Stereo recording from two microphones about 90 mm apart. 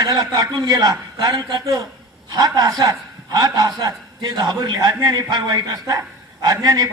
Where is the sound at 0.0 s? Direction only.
50° right (ahead or behind).